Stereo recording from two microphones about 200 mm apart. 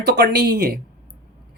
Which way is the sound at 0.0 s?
55° right (ahead or behind).